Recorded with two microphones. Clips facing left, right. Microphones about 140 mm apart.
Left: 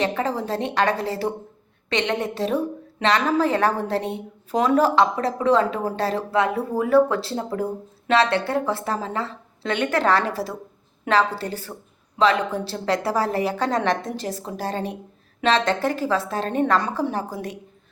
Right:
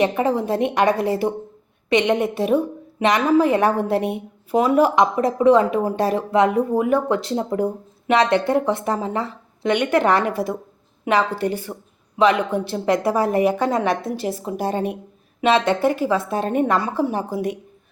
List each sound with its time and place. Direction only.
0.0 s a woman's voice: 15° right (ahead or behind)